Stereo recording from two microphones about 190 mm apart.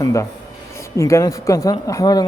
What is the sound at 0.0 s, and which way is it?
Speech, 15° left (ahead or behind).